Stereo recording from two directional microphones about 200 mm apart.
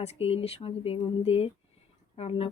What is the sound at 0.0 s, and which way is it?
Speech, 30° left (ahead or behind).